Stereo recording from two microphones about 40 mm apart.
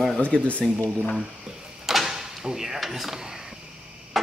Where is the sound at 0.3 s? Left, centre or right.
Left.